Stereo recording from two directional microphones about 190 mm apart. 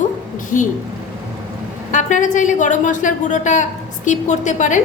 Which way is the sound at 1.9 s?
40° left (ahead or behind).